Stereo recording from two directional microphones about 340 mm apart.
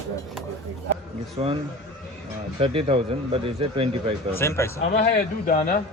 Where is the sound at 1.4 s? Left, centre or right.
Centre.